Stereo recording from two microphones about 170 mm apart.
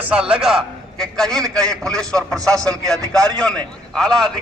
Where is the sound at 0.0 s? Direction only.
5° right (ahead or behind).